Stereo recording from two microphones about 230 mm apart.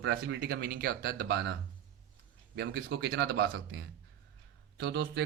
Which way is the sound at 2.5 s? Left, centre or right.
Right.